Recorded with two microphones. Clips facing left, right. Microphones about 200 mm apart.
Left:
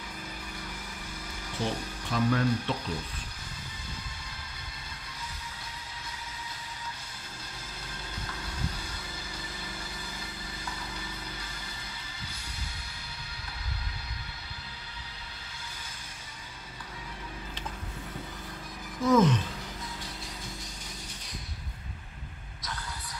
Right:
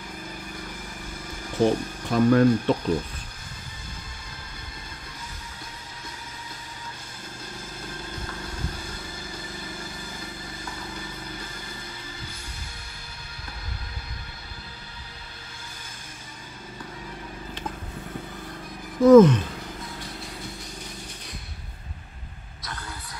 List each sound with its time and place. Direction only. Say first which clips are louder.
1.6 s speech: right 11 dB; 50° right (ahead or behind)
19.0 s sigh: right 11 dB; 55° right (ahead or behind)